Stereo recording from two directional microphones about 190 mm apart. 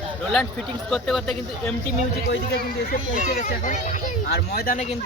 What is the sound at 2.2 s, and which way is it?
Speech, 55° left (ahead or behind).